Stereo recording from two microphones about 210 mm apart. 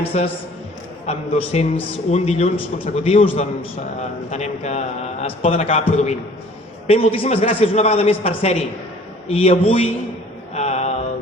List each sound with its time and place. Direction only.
0.1 s a man's voice: 30° left (ahead or behind)
6.8 s a man's voice: 25° left (ahead or behind)
10.5 s mantra: 30° left (ahead or behind)